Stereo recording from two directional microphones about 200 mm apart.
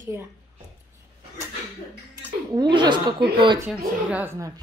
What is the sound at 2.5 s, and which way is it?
Speech, 25° right (ahead or behind).